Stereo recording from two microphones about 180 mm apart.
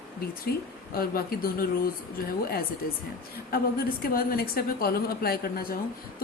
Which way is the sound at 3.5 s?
55° left (ahead or behind).